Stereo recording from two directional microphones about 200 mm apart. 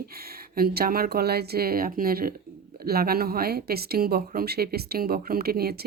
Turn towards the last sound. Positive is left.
turn(degrees=-50)  # may be behind; listen again after turning